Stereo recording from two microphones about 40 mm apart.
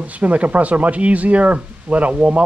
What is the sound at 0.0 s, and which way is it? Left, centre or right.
Speech, right.